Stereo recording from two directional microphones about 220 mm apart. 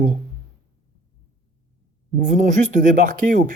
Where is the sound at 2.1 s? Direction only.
35° right (ahead or behind).